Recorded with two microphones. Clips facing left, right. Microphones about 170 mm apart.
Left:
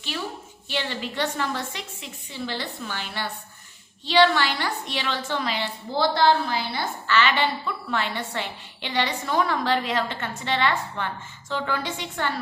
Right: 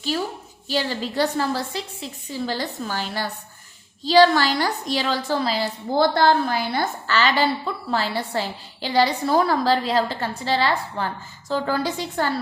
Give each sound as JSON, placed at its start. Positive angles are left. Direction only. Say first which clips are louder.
{"t": 0.7, "sound": "a woman's voice", "louder": "right 5 dB", "side_deg": -35}